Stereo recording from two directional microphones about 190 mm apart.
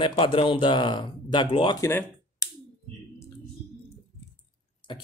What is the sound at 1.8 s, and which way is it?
Speech, 10° left (ahead or behind).